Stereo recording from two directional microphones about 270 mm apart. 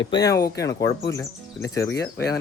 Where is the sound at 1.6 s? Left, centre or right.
Centre.